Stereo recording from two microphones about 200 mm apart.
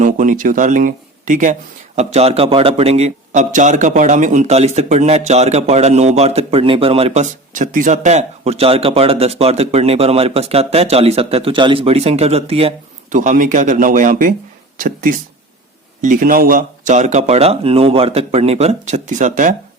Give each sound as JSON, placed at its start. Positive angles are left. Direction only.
{"t": 0.0, "sound": "a man's voice", "side_deg": -40}